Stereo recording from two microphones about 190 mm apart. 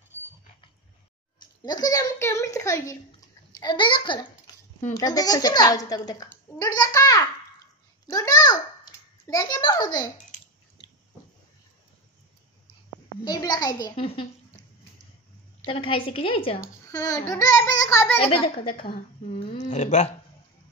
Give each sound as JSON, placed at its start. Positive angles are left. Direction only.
{"t": 1.6, "sound": "a child's voice", "side_deg": 20}
{"t": 8.1, "sound": "a sound", "side_deg": 20}
{"t": 13.2, "sound": "a child's voice", "side_deg": 20}
{"t": 15.6, "sound": "a child's voice", "side_deg": 25}
{"t": 16.9, "sound": "a child's voice", "side_deg": 15}
{"t": 18.2, "sound": "a child's voice", "side_deg": 30}
{"t": 19.6, "sound": "speech", "side_deg": 40}